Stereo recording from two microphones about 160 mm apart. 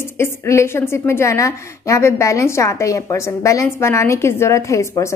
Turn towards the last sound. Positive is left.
turn(degrees=20)  # may be behind; listen again after turning